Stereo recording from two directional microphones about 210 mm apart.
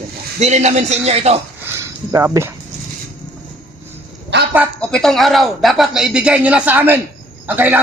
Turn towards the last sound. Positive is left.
turn(degrees=-10)  # may be behind; listen again after turning